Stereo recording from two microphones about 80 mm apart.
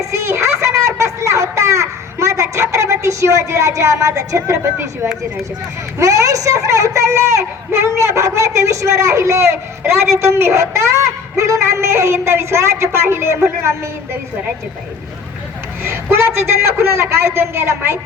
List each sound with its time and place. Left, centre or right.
0.0 s a sound: right
6.0 s a woman's voice: right
15.8 s a woman's voice: right